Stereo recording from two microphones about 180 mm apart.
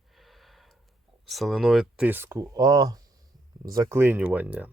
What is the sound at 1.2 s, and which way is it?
Speech, centre (ahead or behind).